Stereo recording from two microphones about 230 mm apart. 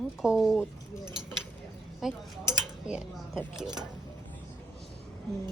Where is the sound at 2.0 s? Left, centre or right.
Centre.